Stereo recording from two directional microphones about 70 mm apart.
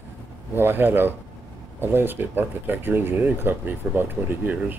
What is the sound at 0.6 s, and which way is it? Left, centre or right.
Speech, right.